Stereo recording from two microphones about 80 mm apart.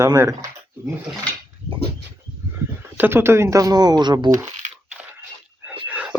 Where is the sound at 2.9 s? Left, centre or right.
Right.